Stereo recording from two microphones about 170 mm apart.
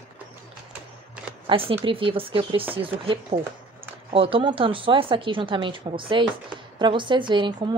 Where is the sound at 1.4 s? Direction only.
30° right (ahead or behind).